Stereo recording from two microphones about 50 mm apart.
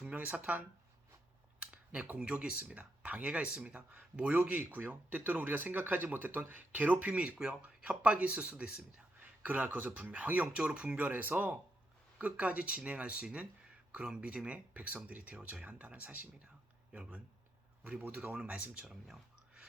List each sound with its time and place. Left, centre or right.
0.1 s speech: right
1.5 s camera: right
2.1 s speech: centre
4.6 s speech: right
9.2 s speech: right